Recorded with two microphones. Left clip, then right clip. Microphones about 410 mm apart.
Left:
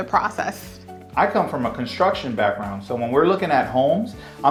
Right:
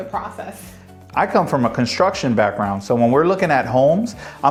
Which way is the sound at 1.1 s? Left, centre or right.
Right.